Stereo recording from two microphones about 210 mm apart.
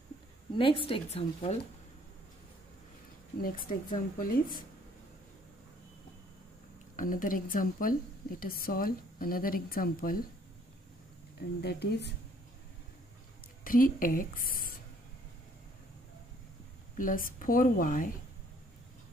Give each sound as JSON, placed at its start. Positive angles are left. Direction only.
{"t": 0.6, "sound": "speech", "side_deg": 25}
{"t": 3.3, "sound": "a woman's voice", "side_deg": 45}
{"t": 7.0, "sound": "a woman's voice", "side_deg": 40}
{"t": 11.3, "sound": "a woman's voice", "side_deg": 50}
{"t": 13.7, "sound": "a woman's voice", "side_deg": 40}
{"t": 16.9, "sound": "a woman's voice", "side_deg": 40}